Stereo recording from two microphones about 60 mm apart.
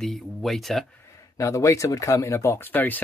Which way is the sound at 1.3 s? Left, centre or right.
Left.